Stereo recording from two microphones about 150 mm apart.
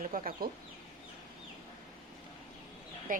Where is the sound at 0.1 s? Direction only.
75° right (ahead or behind).